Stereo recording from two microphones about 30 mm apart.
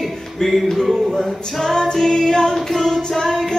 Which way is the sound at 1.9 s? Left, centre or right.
Centre.